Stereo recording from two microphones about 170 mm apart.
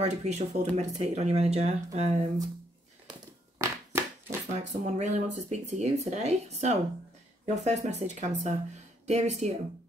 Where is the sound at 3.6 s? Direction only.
15° right (ahead or behind).